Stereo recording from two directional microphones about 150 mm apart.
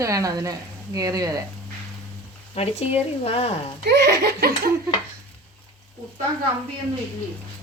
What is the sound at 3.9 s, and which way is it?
Laughter, 90° right.